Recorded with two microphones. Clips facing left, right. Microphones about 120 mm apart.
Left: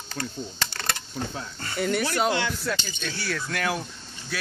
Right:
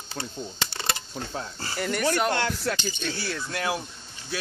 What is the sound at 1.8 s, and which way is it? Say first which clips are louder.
Speech: left 3 dB; centre (ahead or behind).